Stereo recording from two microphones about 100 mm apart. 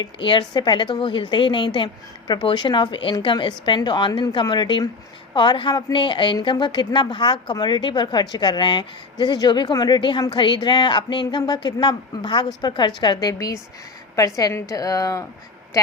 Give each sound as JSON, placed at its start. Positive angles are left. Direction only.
{"t": 0.0, "sound": "a woman's voice", "side_deg": 50}